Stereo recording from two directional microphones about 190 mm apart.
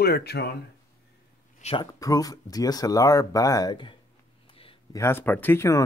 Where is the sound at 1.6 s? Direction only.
30° left (ahead or behind).